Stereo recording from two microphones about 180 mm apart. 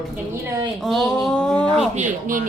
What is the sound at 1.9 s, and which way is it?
Speech, 45° right (ahead or behind).